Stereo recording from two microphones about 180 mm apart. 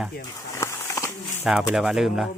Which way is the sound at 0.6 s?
15° left (ahead or behind).